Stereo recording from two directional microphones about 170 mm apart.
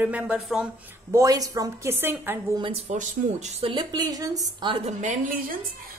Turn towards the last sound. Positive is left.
turn(degrees=-50)  # may be behind; listen again after turning